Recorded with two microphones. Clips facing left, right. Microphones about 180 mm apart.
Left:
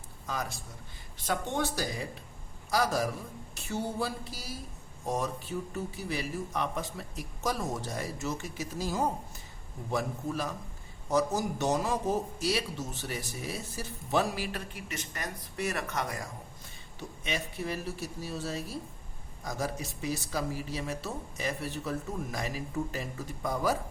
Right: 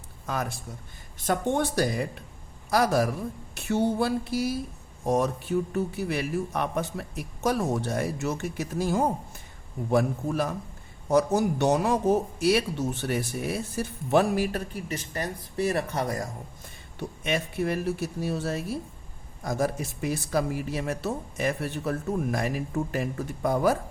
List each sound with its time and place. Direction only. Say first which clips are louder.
1.2 s a man's voice: right 6 dB; 50° right (ahead or behind)
3.5 s a sound: right 9 dB; 65° right (ahead or behind)
5.0 s a man's voice: right 8 dB; 65° right (ahead or behind); by 16.3 s 40° right (ahead or behind)
17.0 s a man's voice: right 7 dB; 60° right (ahead or behind)